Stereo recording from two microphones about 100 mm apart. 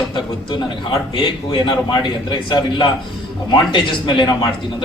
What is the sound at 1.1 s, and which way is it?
A man's voice, 55° left (ahead or behind).